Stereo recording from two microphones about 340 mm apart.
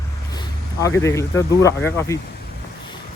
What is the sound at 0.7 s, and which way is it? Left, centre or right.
Speech, centre.